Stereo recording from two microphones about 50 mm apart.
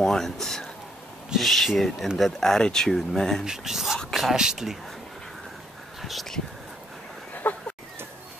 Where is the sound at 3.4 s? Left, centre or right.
Centre.